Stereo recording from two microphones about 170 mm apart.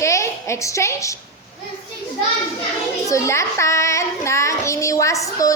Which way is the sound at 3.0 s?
15° left (ahead or behind).